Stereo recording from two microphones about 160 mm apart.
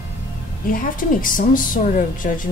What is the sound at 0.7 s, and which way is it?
A woman's voice, 60° left (ahead or behind).